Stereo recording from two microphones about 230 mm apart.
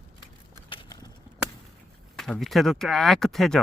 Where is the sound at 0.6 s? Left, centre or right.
Centre.